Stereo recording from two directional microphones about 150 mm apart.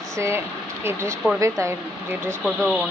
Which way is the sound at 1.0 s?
5° left (ahead or behind).